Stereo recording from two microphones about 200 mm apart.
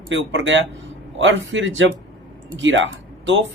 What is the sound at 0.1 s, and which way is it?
A man's voice, 70° right (ahead or behind).